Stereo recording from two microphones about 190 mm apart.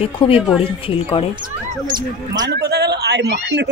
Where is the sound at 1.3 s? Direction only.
25° right (ahead or behind).